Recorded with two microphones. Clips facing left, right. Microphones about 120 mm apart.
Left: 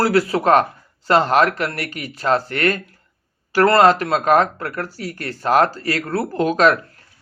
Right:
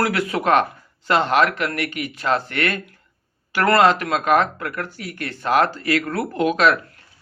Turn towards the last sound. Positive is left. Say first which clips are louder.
# left 2 dB
turn(degrees=40)  # may be behind; listen again after turning